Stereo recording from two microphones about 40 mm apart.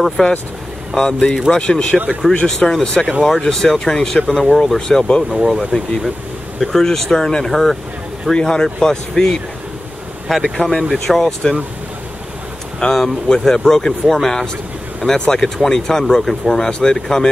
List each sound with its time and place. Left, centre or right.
0.2 s speech: centre
5.4 s speech: centre
10.2 s speech: centre
10.6 s speech: centre
12.9 s speech: centre